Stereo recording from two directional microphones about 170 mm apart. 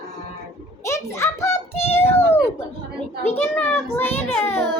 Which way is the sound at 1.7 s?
35° left (ahead or behind).